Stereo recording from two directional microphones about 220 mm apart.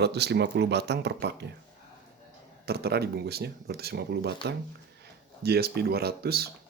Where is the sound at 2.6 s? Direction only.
45° right (ahead or behind).